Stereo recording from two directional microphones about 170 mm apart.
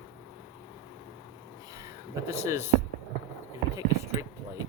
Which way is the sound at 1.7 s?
15° right (ahead or behind).